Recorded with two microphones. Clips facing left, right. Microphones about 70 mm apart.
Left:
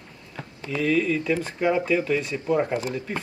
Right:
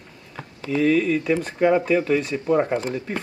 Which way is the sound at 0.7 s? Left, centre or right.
Right.